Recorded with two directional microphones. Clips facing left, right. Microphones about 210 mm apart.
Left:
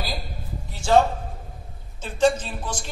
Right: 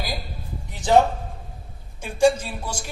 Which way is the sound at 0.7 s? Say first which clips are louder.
Right 1 dB; 20° right (ahead or behind).